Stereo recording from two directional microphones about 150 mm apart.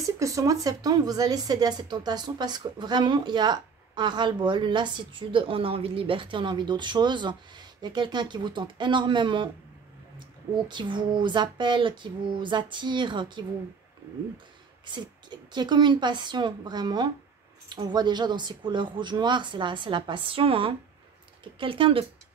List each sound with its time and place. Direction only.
0.2 s speech: 20° right (ahead or behind)
10.7 s speech: 30° right (ahead or behind)
14.9 s a woman's voice: 30° right (ahead or behind)